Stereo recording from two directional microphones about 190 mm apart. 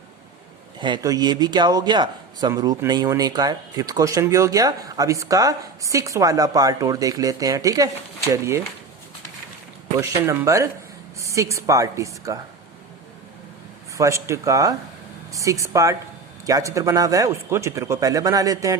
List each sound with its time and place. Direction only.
0.8 s a man's voice: 20° right (ahead or behind)
10.0 s speech: 15° right (ahead or behind)
13.9 s speech: 15° right (ahead or behind)